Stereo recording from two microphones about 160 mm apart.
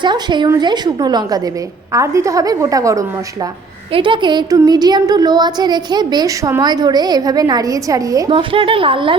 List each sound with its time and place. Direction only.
0.0 s speech: 30° right (ahead or behind)
3.9 s speech: 30° right (ahead or behind)
8.3 s a woman's voice: 35° right (ahead or behind)